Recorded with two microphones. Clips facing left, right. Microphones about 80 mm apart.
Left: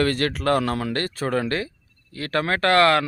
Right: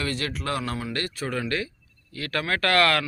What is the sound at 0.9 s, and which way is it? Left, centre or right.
Speech, left.